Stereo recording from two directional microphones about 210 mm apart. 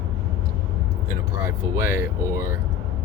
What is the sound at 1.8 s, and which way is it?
Speech, 15° right (ahead or behind).